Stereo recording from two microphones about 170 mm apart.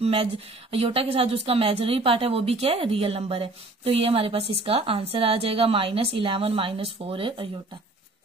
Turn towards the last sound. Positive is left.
turn(degrees=-30)  # may be behind; listen again after turning